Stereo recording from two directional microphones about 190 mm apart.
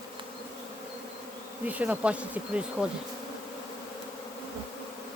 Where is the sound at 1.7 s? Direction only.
10° right (ahead or behind).